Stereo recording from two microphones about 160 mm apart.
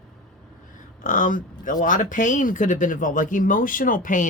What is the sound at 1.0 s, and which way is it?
Speech, 55° left (ahead or behind).